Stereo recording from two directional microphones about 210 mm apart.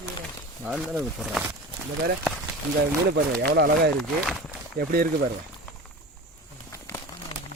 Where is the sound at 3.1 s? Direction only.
50° right (ahead or behind).